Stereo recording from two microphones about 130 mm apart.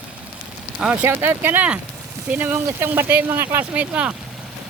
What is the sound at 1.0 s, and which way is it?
Speech, 15° right (ahead or behind).